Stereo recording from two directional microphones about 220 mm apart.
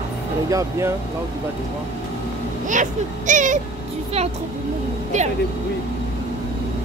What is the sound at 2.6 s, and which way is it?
Speech, 35° right (ahead or behind).